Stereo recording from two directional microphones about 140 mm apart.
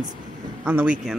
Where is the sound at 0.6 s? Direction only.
10° right (ahead or behind).